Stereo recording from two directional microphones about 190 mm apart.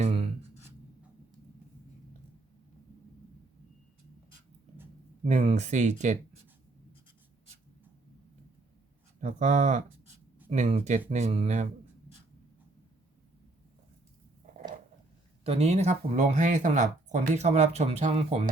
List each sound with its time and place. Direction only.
5.2 s speech: 40° right (ahead or behind)
9.2 s speech: 40° right (ahead or behind)
15.4 s speech: 35° right (ahead or behind)